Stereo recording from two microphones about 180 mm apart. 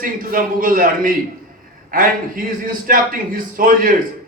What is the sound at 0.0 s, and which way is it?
A man's voice, 50° right (ahead or behind).